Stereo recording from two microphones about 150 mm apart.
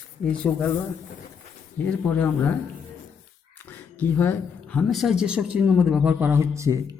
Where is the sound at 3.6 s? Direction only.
15° left (ahead or behind).